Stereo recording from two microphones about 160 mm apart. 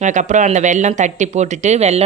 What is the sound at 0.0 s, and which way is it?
Speech, 50° right (ahead or behind).